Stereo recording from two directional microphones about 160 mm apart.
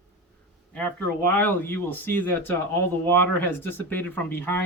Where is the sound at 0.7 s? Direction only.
10° left (ahead or behind).